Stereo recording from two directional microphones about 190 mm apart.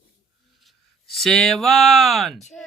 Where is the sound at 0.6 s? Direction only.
Centre (ahead or behind).